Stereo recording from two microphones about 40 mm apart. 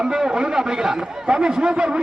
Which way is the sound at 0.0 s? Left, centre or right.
Right.